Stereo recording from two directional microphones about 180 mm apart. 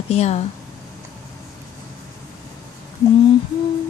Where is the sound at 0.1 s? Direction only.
40° left (ahead or behind).